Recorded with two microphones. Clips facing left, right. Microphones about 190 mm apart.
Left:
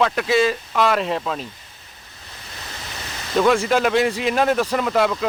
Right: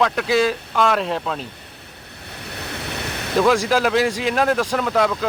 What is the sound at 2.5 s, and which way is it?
Waves, 65° right (ahead or behind).